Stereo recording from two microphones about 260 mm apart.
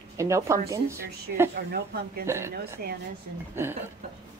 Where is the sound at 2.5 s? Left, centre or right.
Right.